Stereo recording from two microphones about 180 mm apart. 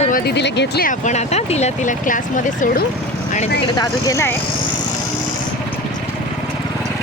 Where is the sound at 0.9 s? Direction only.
40° left (ahead or behind).